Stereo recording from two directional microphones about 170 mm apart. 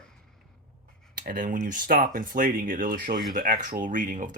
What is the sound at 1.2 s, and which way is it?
Speech, 55° right (ahead or behind).